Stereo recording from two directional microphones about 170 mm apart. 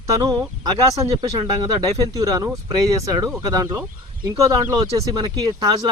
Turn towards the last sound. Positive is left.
turn(degrees=-25)  # may be behind; listen again after turning